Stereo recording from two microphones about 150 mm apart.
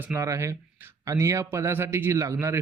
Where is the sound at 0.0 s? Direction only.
20° right (ahead or behind).